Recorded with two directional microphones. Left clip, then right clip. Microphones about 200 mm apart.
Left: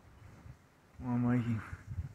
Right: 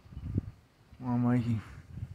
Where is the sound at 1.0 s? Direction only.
20° right (ahead or behind).